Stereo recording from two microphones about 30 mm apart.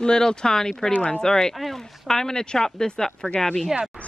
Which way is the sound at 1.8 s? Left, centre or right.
Centre.